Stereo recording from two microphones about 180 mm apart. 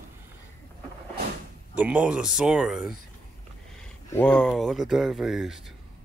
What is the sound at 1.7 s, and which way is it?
Speech, 5° right (ahead or behind).